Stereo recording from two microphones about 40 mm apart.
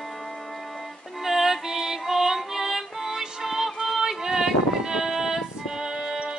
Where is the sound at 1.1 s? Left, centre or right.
Centre.